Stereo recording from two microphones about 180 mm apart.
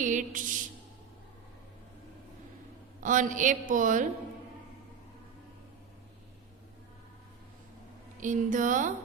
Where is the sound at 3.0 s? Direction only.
45° right (ahead or behind).